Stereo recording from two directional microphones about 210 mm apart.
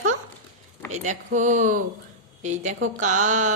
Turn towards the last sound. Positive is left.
turn(degrees=-35)  # may be behind; listen again after turning